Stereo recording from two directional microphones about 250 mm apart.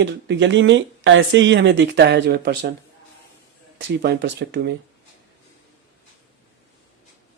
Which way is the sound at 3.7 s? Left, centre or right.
Right.